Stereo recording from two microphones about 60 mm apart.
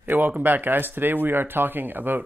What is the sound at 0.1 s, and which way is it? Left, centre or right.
Speech, right.